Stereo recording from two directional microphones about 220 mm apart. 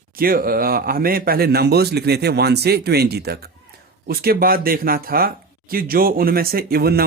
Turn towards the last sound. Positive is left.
turn(degrees=-45)  # may be behind; listen again after turning